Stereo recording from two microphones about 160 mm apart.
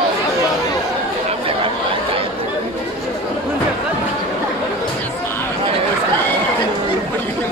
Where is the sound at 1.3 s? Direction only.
35° right (ahead or behind).